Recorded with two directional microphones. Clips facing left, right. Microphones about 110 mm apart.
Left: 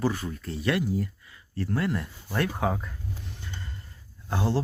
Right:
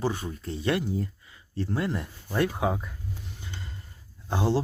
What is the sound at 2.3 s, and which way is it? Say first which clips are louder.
Speech: right 1 dB; 10° right (ahead or behind).